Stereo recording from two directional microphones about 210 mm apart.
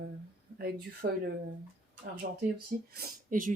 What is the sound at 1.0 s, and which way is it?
Speech, 35° right (ahead or behind).